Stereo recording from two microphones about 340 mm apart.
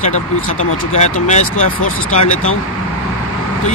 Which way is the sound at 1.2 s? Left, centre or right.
Left.